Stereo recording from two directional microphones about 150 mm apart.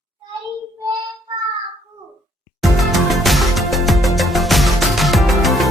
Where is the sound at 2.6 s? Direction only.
Centre (ahead or behind).